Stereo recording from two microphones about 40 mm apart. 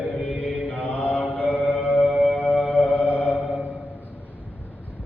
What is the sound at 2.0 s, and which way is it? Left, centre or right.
Music, centre.